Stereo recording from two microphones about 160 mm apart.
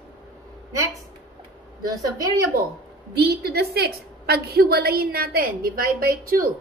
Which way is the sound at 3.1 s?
80° right.